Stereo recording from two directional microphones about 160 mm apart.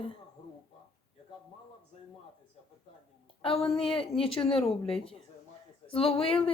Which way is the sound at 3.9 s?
35° left (ahead or behind).